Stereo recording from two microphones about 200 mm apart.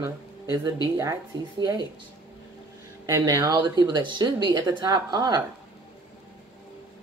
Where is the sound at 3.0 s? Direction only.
15° right (ahead or behind).